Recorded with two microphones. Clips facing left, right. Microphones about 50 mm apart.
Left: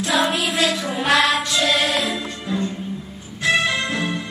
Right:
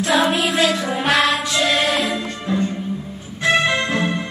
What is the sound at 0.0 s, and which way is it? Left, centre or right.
Music, centre.